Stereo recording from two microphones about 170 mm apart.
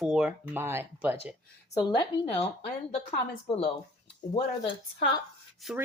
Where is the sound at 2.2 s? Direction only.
35° left (ahead or behind).